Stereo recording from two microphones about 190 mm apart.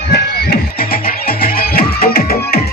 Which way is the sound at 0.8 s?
50° left (ahead or behind).